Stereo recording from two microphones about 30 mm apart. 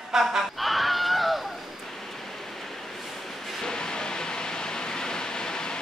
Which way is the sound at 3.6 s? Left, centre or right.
Left.